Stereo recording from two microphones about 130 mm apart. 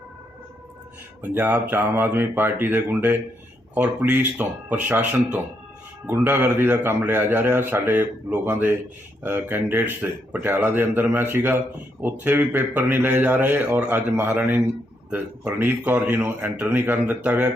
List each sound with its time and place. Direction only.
1.2 s speech: 15° right (ahead or behind)